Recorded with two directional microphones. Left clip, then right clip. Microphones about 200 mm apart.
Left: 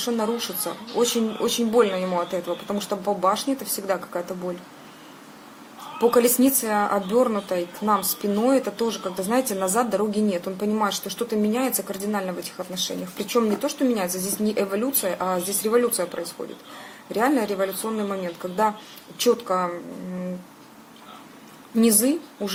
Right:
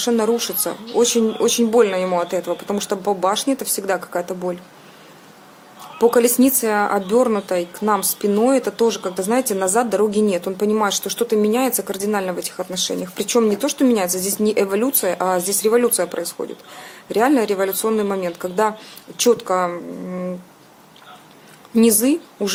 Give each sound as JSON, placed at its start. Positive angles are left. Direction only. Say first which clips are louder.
{"t": 0.0, "sound": "a woman's voice", "louder": "right 7 dB", "side_deg": -35}
{"t": 6.0, "sound": "a woman's voice", "louder": "right 4 dB", "side_deg": -30}
{"t": 21.8, "sound": "a woman's voice", "louder": "right 5 dB", "side_deg": -35}